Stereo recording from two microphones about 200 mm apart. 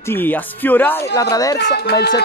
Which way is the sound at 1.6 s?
55° left (ahead or behind).